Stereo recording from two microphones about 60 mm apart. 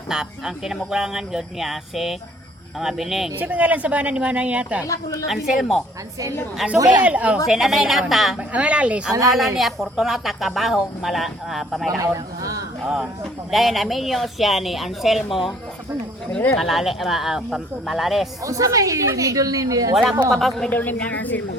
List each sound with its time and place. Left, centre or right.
0.1 s a woman's voice: centre
3.3 s speech: right
5.3 s a woman's voice: centre
7.0 s speech: right
7.4 s a woman's voice: centre
8.4 s speech: right
9.6 s a woman's voice: centre
12.0 s a sound: right
13.5 s a woman's voice: centre
16.6 s a woman's voice: centre
18.4 s a woman's voice: right
19.9 s a woman's voice: centre
20.7 s speech: left